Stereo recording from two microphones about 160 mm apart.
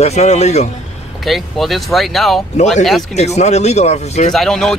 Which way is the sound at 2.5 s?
45° left (ahead or behind).